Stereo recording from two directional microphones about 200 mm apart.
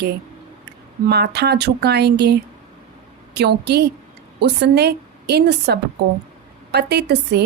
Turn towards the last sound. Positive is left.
turn(degrees=-55)  # may be behind; listen again after turning